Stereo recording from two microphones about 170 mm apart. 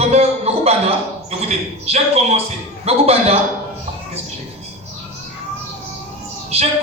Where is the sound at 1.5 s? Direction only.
40° right (ahead or behind).